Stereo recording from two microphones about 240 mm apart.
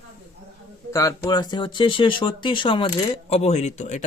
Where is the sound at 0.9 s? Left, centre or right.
Centre.